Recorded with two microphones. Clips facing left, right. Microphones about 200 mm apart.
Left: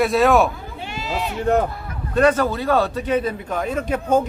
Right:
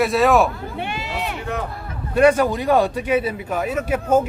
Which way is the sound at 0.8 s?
60° right (ahead or behind).